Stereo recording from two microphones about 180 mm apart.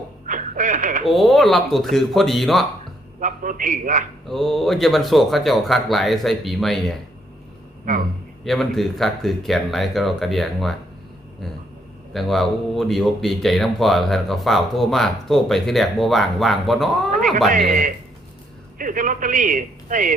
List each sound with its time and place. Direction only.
0.3 s a sound: 45° right (ahead or behind)
1.0 s speech: centre (ahead or behind)
3.2 s a man's voice: 45° right (ahead or behind)
4.3 s speech: centre (ahead or behind)
8.4 s speech: centre (ahead or behind)
12.1 s speech: centre (ahead or behind)
17.7 s a man's voice: 45° right (ahead or behind)